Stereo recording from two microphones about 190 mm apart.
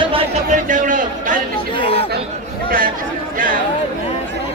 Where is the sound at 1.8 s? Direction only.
30° left (ahead or behind).